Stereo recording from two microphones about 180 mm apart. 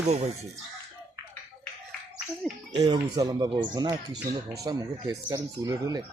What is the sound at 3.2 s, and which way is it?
Speech, 20° right (ahead or behind).